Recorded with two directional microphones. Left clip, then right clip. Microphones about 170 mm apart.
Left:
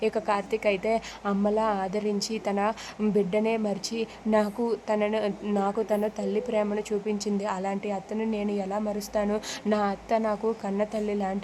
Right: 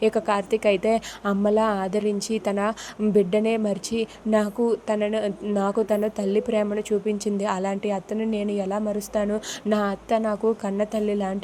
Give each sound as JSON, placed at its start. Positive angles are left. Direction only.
{"t": 0.0, "sound": "a woman's voice", "side_deg": -20}